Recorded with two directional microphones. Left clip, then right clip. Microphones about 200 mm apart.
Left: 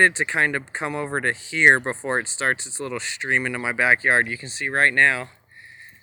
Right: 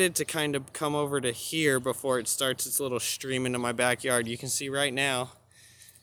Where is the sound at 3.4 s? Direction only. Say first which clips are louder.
Left 5 dB; 15° right (ahead or behind).